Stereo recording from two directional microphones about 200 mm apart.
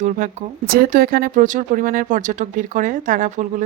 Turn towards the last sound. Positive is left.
turn(degrees=-40)  # may be behind; listen again after turning